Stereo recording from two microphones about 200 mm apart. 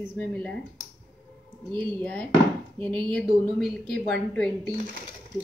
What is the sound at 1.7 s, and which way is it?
Speech, 20° right (ahead or behind).